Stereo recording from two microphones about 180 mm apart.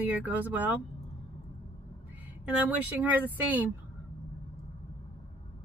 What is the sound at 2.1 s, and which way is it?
Speech, 10° right (ahead or behind).